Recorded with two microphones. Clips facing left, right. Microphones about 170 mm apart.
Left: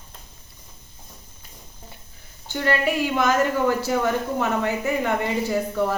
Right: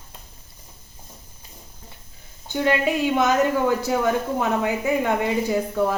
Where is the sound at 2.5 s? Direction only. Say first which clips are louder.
Right 1 dB; 15° right (ahead or behind).